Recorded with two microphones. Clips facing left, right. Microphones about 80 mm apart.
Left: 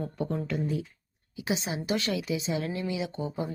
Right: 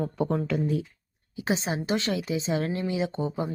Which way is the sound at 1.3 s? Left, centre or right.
Right.